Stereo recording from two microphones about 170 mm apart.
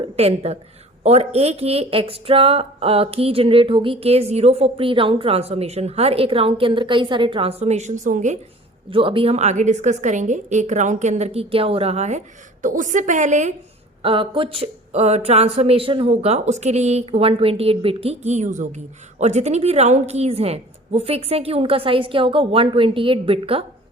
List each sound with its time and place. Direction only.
0.2 s speech: 35° right (ahead or behind)
8.9 s a woman's voice: 30° right (ahead or behind)
14.0 s speech: 30° right (ahead or behind)